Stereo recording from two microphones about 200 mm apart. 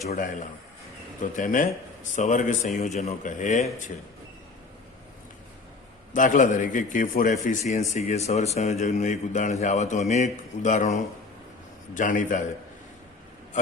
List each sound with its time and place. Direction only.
0.1 s a man's voice: 40° left (ahead or behind)
6.1 s a man's voice: 40° left (ahead or behind)